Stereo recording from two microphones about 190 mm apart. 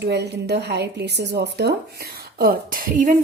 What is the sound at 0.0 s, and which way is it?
A woman's voice, 60° right (ahead or behind).